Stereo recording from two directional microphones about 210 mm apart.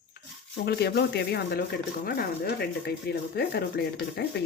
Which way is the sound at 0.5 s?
50° left (ahead or behind).